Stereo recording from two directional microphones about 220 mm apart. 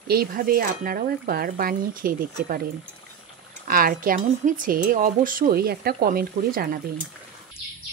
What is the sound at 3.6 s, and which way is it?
Speech, 40° right (ahead or behind).